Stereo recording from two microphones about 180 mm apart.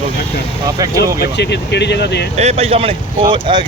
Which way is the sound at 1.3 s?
70° left (ahead or behind).